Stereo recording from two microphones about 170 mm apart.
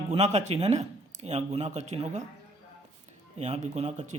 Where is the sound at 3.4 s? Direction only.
40° right (ahead or behind).